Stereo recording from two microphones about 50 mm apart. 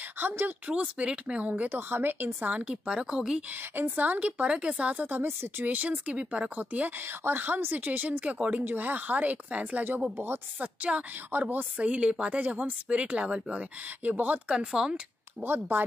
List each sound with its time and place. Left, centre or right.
0.2 s speech: right
0.7 s speech: right
1.7 s speech: right
2.5 s speech: right
3.7 s speech: right
5.2 s speech: right
5.7 s speech: right
7.1 s speech: right
10.1 s speech: right
10.6 s speech: right
14.0 s speech: right
14.5 s speech: centre
15.4 s speech: right